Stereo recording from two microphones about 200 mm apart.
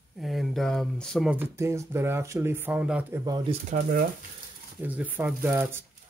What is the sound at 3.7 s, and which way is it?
Speech, 45° right (ahead or behind).